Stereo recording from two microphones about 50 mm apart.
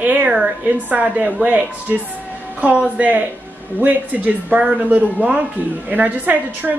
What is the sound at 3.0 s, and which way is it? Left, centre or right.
A woman's voice, right.